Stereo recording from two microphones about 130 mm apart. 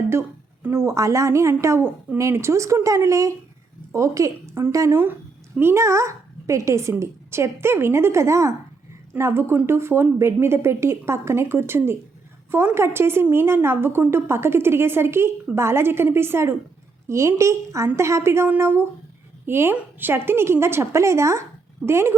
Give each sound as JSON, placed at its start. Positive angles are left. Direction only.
{"t": 0.1, "sound": "a woman's voice", "side_deg": -20}